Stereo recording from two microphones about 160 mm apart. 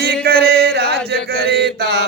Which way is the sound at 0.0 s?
85° right.